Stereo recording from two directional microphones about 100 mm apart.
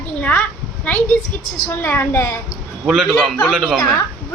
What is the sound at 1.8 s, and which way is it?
Speech, 25° left (ahead or behind).